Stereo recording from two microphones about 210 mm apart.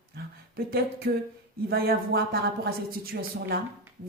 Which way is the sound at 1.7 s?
45° right (ahead or behind).